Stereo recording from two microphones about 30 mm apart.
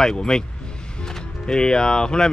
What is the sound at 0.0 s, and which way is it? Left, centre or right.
Speech, left.